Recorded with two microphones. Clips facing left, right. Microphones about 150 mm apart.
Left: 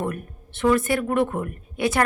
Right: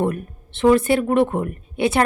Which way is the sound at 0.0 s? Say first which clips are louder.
Right 6 dB; 25° right (ahead or behind).